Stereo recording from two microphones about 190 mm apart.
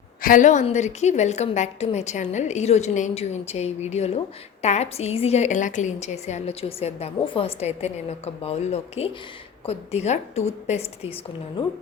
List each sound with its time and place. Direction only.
0.2 s a woman's voice: 45° left (ahead or behind)